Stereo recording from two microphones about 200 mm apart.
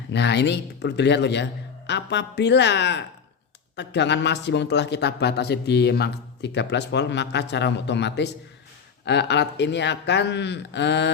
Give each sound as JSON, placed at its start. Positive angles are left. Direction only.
{"t": 0.1, "sound": "a man's voice", "side_deg": 60}